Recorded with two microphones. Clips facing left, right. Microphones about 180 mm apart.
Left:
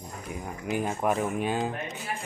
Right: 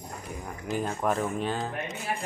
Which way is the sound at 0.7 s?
10° left (ahead or behind).